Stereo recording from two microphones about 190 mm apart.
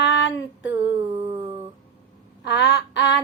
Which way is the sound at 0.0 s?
65° left (ahead or behind).